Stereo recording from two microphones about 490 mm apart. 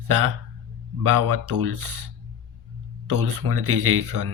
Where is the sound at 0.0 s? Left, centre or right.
Right.